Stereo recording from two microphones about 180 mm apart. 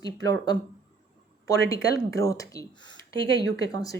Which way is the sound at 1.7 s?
20° left (ahead or behind).